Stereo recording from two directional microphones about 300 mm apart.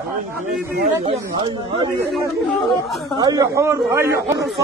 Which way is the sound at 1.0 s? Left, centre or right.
Centre.